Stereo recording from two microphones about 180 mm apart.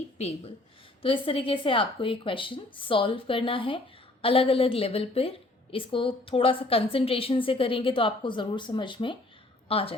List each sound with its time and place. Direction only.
0.2 s a woman's voice: 35° left (ahead or behind)